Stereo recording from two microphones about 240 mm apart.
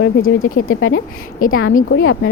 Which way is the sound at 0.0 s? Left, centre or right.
Left.